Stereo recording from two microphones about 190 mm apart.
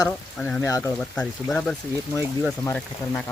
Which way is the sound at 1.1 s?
5° left (ahead or behind).